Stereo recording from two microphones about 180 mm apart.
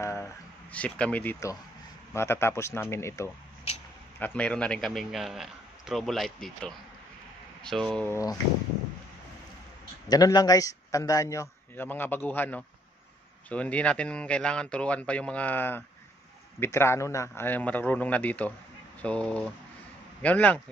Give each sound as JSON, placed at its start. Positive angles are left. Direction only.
{"t": 0.0, "sound": "a man's voice", "side_deg": 15}
{"t": 10.0, "sound": "a man's voice", "side_deg": 20}